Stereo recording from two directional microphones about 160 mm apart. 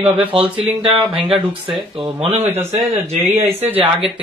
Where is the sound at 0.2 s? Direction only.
35° right (ahead or behind).